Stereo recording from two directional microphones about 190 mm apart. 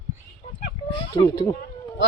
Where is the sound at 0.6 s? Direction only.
25° left (ahead or behind).